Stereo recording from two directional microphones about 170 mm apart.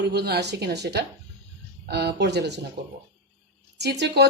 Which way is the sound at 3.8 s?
80° right.